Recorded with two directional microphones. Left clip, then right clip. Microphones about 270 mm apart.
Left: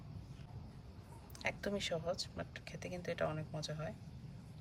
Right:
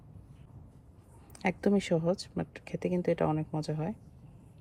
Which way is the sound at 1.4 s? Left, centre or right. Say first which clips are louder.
Right 10 dB; right.